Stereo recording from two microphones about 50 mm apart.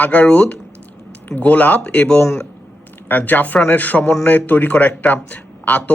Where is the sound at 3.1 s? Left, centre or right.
Left.